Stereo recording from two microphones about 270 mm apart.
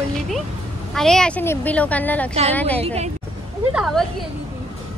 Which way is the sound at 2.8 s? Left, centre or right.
Right.